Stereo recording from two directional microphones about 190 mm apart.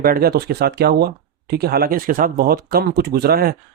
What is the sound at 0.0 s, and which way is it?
Speech, 50° right (ahead or behind).